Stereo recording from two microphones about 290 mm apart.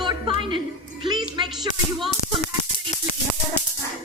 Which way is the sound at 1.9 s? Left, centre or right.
Centre.